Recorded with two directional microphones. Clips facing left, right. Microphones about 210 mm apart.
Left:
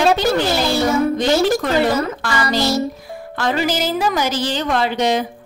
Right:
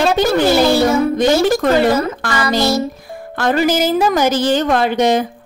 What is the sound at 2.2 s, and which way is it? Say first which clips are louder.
A woman's voice: right 2 dB; 50° right (ahead or behind).